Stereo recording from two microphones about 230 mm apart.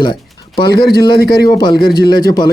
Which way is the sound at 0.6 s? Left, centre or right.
Left.